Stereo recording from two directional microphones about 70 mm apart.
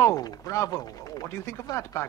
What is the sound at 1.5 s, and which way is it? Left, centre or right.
Speech, left.